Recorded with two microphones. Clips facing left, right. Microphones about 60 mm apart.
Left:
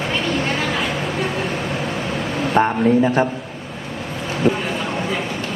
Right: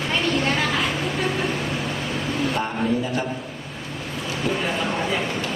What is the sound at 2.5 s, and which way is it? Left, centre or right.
Speech, left.